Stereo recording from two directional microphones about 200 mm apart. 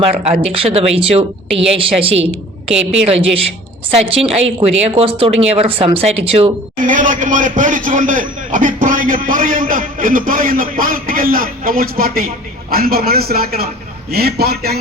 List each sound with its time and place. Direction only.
0.3 s a woman's voice: 30° right (ahead or behind)
3.9 s a woman's voice: 30° right (ahead or behind)
6.8 s a man's voice: 40° right (ahead or behind)